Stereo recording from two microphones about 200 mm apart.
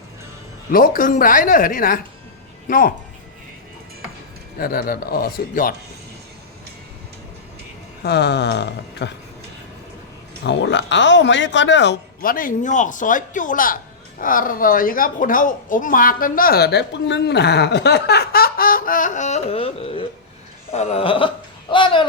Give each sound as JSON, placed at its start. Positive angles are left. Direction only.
{"t": 0.7, "sound": "a woman's voice", "side_deg": 45}
{"t": 4.5, "sound": "a woman's voice", "side_deg": 45}
{"t": 8.0, "sound": "speech", "side_deg": 55}
{"t": 10.4, "sound": "a woman's voice", "side_deg": 60}